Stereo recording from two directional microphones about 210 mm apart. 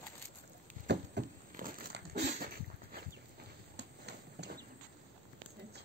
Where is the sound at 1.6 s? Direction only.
40° right (ahead or behind).